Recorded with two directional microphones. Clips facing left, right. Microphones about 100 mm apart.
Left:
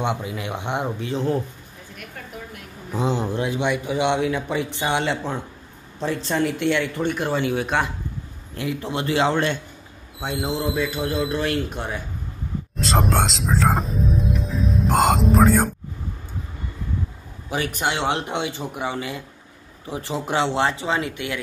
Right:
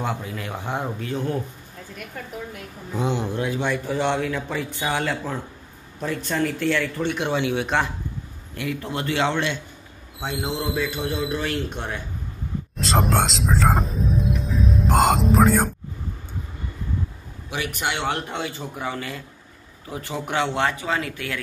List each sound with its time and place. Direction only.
0.0 s speech: 20° left (ahead or behind)
2.9 s speech: 35° left (ahead or behind)
3.4 s speech: 20° left (ahead or behind)
7.1 s speech: centre (ahead or behind)
8.5 s speech: 25° left (ahead or behind)
10.2 s speech: centre (ahead or behind)
12.7 s music: centre (ahead or behind)
17.5 s speech: 35° left (ahead or behind)